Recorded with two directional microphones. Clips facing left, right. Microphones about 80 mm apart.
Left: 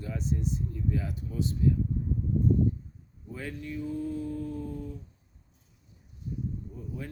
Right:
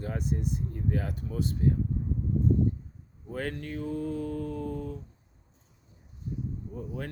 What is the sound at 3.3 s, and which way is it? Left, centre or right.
Speech, right.